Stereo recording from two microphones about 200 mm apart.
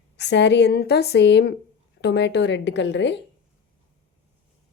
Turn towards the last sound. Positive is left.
turn(degrees=60)  # may be behind; listen again after turning